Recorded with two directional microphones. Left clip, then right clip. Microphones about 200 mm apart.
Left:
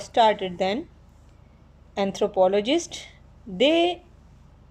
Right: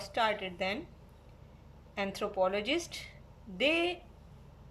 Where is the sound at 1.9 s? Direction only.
35° left (ahead or behind).